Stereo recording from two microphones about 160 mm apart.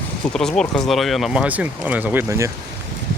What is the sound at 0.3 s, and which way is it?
Speech, 5° left (ahead or behind).